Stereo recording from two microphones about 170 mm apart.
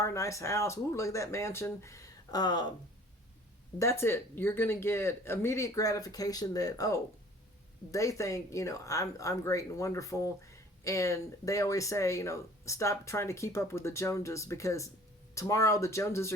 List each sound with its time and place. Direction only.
0.0 s speech: 20° left (ahead or behind)
3.8 s speech: 15° left (ahead or behind)